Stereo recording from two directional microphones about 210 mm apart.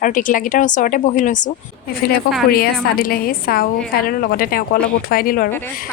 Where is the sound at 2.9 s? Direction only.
45° left (ahead or behind).